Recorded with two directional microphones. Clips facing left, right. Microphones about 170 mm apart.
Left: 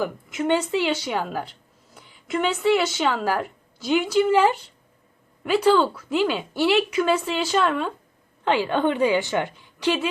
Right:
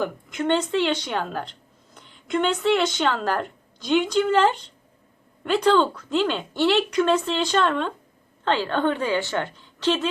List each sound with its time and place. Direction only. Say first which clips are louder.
0.0 s a woman's voice: even; 5° left (ahead or behind)